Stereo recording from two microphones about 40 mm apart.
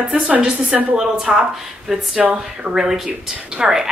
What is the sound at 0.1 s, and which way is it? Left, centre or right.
Speech, right.